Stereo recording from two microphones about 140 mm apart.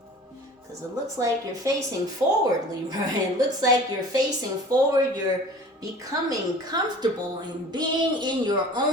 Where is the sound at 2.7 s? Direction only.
25° right (ahead or behind).